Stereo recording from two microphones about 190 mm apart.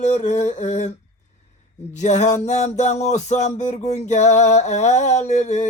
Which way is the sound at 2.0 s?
35° left (ahead or behind).